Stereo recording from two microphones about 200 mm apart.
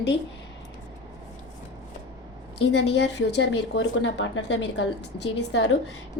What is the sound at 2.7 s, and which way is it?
Speech, 60° left (ahead or behind).